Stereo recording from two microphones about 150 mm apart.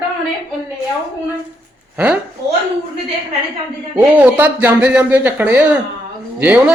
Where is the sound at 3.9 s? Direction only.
10° right (ahead or behind).